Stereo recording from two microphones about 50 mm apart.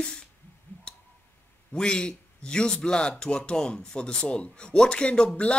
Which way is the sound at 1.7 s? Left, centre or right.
Centre.